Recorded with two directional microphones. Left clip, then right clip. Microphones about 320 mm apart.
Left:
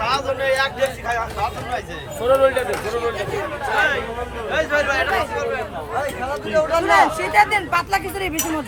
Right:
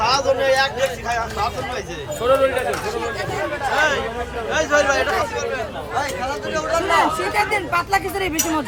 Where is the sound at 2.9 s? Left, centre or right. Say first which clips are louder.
Left 2 dB; left.